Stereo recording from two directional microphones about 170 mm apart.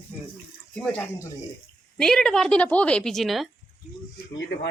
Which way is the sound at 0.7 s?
5° left (ahead or behind).